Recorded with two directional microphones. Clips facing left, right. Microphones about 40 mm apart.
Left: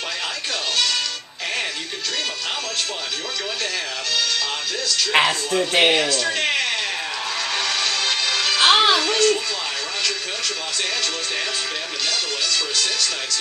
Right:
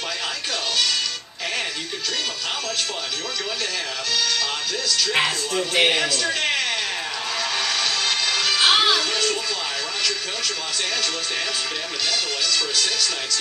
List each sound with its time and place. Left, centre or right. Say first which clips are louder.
5.1 s speech: left 5 dB; left
5.5 s speech: left 1 dB; centre
5.9 s music: left 2 dB; centre
12.1 s music: even; centre